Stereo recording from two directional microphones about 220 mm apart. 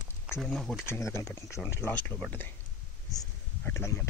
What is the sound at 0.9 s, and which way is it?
Speech, 10° left (ahead or behind).